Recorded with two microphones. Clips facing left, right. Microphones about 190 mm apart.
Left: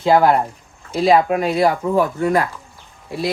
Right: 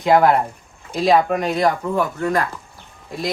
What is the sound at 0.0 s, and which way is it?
Speech, 5° left (ahead or behind).